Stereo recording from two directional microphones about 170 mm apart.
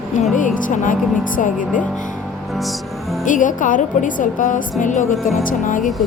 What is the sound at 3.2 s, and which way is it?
Speech, 50° left (ahead or behind).